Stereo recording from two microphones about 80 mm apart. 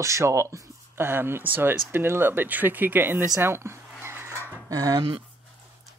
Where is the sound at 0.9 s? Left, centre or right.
Right.